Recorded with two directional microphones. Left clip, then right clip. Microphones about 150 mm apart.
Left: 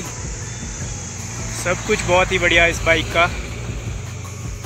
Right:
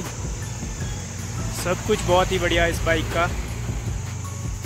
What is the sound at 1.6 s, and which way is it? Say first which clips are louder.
Speech: left 3 dB; 20° right (ahead or behind).